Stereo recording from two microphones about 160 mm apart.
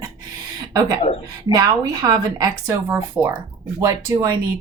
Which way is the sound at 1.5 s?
20° right (ahead or behind).